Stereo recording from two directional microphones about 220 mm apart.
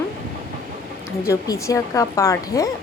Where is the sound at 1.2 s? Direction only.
15° left (ahead or behind).